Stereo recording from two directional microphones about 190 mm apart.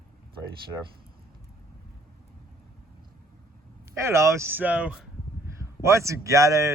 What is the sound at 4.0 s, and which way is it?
Speech, 15° right (ahead or behind).